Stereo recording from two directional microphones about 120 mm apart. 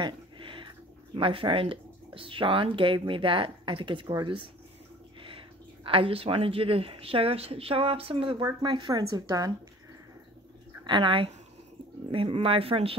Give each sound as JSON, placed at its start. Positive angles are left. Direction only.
{"t": 0.0, "sound": "a woman's voice", "side_deg": -45}
{"t": 5.9, "sound": "a woman's voice", "side_deg": -50}
{"t": 8.4, "sound": "a woman's voice", "side_deg": -30}
{"t": 10.8, "sound": "a woman's voice", "side_deg": -40}